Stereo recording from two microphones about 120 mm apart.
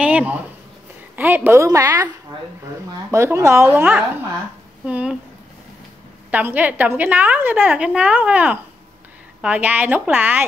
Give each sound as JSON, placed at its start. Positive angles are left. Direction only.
{"t": 0.0, "sound": "a sound", "side_deg": -10}
{"t": 1.1, "sound": "a woman's voice", "side_deg": -15}
{"t": 3.1, "sound": "a woman's voice", "side_deg": -25}
{"t": 6.3, "sound": "a woman's voice", "side_deg": -15}